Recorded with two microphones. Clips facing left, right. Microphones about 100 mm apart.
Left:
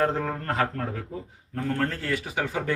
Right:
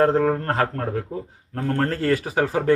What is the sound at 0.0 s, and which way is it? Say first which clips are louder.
Speech: right 7 dB; 35° right (ahead or behind).